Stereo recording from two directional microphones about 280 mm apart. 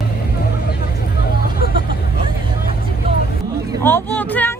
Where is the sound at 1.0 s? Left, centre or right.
Left.